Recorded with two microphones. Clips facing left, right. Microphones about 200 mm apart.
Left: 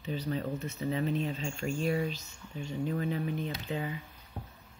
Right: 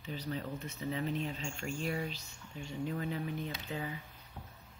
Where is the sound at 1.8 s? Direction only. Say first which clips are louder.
Left 7 dB; 25° left (ahead or behind).